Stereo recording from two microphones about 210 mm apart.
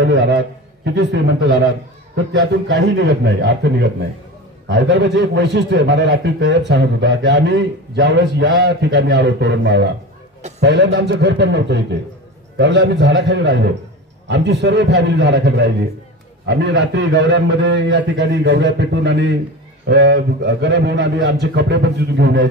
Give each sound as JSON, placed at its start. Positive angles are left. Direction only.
{"t": 0.0, "sound": "a man's voice", "side_deg": -55}